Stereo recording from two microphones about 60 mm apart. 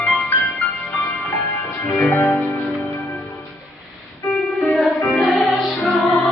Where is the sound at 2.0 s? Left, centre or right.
Left.